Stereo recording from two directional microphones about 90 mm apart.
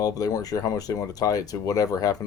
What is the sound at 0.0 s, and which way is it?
Speech, 45° left (ahead or behind).